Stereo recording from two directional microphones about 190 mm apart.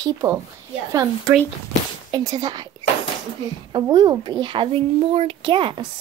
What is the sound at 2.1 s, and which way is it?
Speech, 20° right (ahead or behind).